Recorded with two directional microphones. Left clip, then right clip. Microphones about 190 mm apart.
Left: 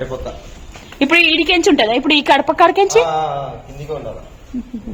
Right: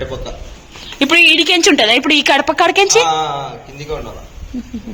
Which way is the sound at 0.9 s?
5° left (ahead or behind).